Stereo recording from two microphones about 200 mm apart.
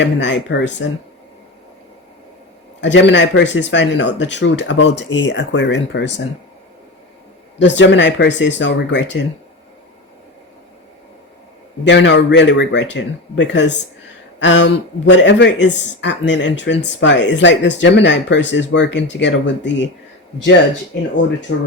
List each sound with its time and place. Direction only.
0.0 s speech: 60° left (ahead or behind)
2.8 s speech: 65° left (ahead or behind)
7.6 s speech: 65° left (ahead or behind)
11.9 s speech: 60° left (ahead or behind)
20.9 s speech: 60° left (ahead or behind)